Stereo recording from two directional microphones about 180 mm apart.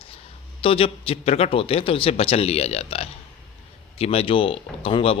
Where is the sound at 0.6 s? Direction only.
30° left (ahead or behind).